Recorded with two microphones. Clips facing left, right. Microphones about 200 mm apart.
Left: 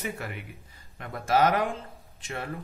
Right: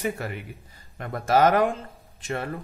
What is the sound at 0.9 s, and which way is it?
Speech, 45° right (ahead or behind).